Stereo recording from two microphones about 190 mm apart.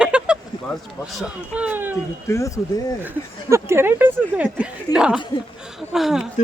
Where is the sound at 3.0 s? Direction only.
15° right (ahead or behind).